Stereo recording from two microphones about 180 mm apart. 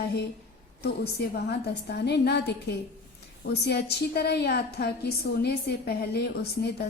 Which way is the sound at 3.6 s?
65° left (ahead or behind).